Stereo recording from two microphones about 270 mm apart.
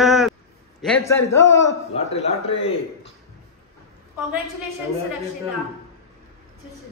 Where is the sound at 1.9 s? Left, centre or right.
Left.